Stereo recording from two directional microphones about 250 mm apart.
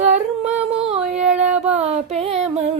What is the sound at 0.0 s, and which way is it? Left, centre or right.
Humming, right.